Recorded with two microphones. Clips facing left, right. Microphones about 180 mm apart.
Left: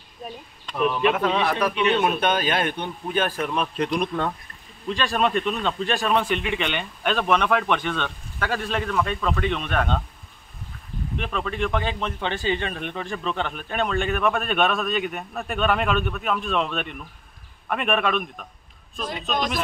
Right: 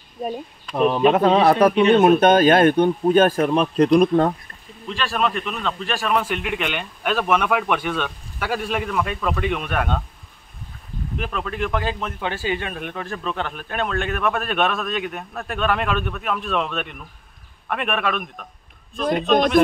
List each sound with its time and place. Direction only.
0.7 s speech: 35° right (ahead or behind)
5.0 s speech: 20° left (ahead or behind)
6.1 s speech: 5° right (ahead or behind)
11.1 s speech: 5° right (ahead or behind)
19.0 s a man's voice: 55° right (ahead or behind)